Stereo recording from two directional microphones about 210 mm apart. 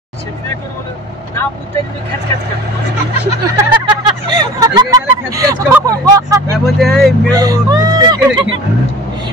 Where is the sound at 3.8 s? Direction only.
20° right (ahead or behind).